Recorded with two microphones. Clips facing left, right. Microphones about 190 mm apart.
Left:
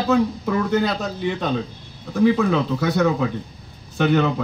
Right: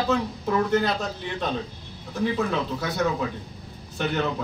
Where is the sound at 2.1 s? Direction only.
60° left (ahead or behind).